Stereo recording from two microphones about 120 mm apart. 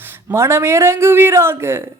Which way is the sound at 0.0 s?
20° right (ahead or behind).